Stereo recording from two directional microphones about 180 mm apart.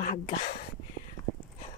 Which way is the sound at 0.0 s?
50° left (ahead or behind).